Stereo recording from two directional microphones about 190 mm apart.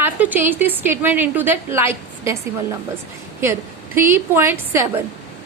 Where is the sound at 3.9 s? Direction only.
15° right (ahead or behind).